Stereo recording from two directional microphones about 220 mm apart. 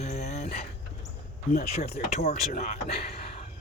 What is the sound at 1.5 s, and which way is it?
Speech, 30° left (ahead or behind).